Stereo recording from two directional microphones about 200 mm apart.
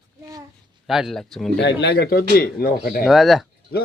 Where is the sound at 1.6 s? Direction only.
55° left (ahead or behind).